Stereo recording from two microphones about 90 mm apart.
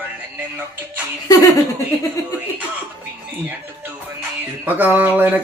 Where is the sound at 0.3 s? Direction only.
20° right (ahead or behind).